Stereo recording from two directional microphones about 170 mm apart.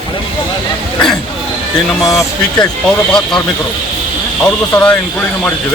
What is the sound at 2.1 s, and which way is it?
Speech, 20° left (ahead or behind).